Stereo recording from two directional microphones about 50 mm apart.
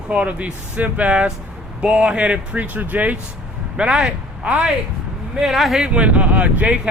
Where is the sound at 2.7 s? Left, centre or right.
Right.